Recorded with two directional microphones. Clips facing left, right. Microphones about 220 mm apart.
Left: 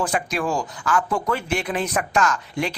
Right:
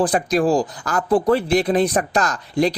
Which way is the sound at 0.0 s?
35° right (ahead or behind).